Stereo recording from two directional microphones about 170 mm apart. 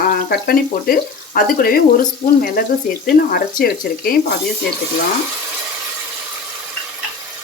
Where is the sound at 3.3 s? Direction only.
60° left (ahead or behind).